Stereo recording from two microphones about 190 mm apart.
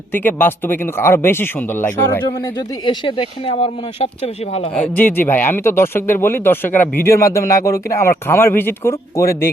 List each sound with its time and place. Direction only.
0.1 s speech: 10° left (ahead or behind)
2.8 s speech: 25° left (ahead or behind)
4.8 s speech: 10° left (ahead or behind)